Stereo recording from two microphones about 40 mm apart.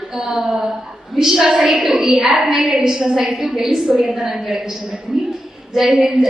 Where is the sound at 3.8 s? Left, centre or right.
Right.